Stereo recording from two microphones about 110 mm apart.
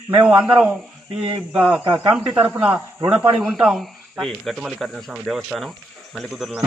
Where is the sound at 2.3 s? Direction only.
15° right (ahead or behind).